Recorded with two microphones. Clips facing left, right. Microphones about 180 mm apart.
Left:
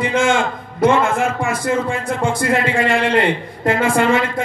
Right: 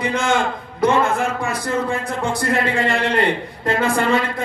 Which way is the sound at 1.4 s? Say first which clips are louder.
Left 3 dB; 50° left (ahead or behind).